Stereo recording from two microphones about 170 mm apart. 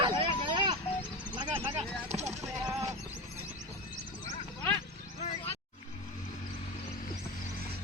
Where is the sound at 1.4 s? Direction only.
30° right (ahead or behind).